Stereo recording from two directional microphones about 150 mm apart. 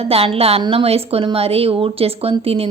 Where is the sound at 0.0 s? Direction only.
40° right (ahead or behind).